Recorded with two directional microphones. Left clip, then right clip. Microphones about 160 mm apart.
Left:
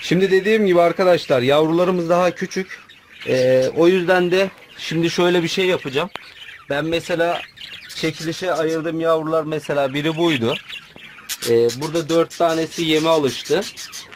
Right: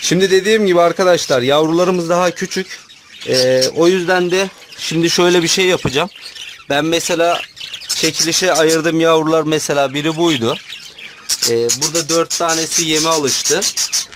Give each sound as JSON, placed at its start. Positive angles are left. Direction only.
{"t": 0.0, "sound": "speech", "side_deg": -15}
{"t": 8.0, "sound": "speech", "side_deg": -40}
{"t": 11.9, "sound": "speech", "side_deg": 5}